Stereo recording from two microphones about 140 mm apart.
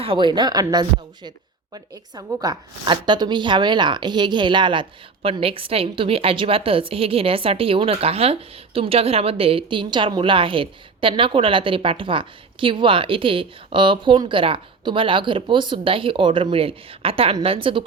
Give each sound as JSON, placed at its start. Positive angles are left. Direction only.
{"t": 0.0, "sound": "a woman's voice", "side_deg": -35}